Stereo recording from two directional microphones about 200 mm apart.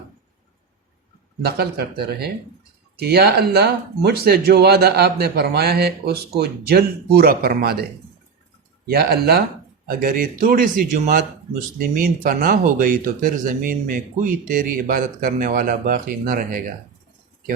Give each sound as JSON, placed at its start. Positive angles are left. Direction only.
{"t": 1.4, "sound": "speech", "side_deg": -50}
{"t": 8.9, "sound": "speech", "side_deg": -50}